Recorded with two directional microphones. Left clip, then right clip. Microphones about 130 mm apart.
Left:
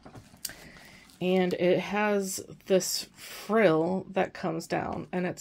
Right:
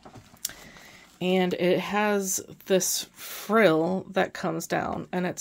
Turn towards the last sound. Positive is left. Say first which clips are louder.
# right 3 dB
turn(degrees=-30)  # may be behind; listen again after turning